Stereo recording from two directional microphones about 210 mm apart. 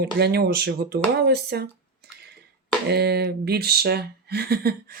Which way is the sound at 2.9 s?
50° right (ahead or behind).